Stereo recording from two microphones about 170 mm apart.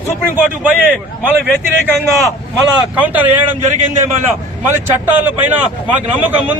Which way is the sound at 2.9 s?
10° right (ahead or behind).